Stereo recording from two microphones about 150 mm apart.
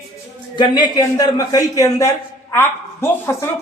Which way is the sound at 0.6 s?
25° left (ahead or behind).